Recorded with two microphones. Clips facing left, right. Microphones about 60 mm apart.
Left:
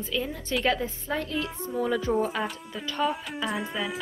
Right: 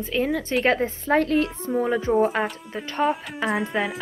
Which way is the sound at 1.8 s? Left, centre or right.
Right.